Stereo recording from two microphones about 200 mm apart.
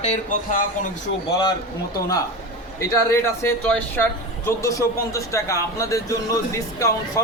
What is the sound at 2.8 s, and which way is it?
A man's voice, 15° left (ahead or behind).